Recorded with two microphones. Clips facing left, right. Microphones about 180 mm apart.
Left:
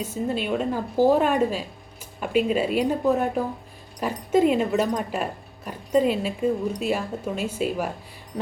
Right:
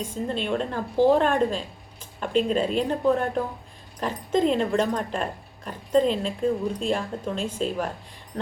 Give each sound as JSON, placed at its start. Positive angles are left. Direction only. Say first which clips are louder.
{"t": 0.0, "sound": "speech", "louder": "left 2 dB", "side_deg": 5}